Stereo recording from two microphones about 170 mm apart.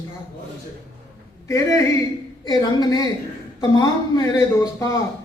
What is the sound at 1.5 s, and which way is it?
Speech, 20° left (ahead or behind).